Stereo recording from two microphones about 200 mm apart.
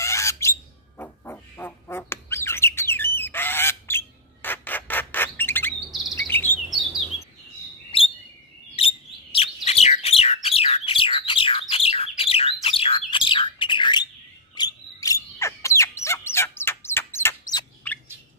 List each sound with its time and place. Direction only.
0.0 s fowl: 15° left (ahead or behind)
3.2 s squawk: 10° left (ahead or behind)
5.9 s chirp: centre (ahead or behind)
6.1 s chirp: 10° left (ahead or behind)
6.7 s chirp: centre (ahead or behind)
7.9 s chirp: 25° left (ahead or behind)
8.7 s bird: 30° left (ahead or behind); by 18.0 s 5° left (ahead or behind)